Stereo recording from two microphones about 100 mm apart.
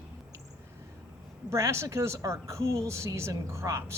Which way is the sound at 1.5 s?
30° right (ahead or behind).